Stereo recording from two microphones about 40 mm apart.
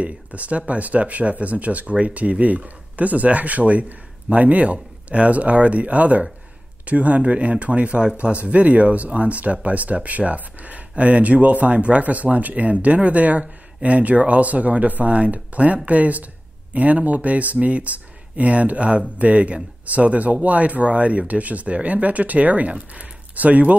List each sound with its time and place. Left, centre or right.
0.0 s speech: right
23.3 s speech: right